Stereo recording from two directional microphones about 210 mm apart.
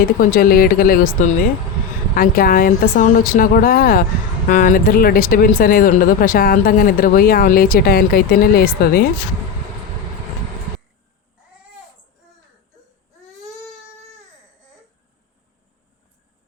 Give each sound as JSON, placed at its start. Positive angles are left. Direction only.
{"t": 0.0, "sound": "speech", "side_deg": 40}